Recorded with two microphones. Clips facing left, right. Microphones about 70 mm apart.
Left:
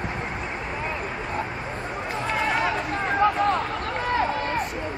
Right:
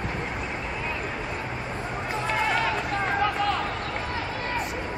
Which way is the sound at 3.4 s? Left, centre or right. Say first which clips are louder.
Left 4 dB; left.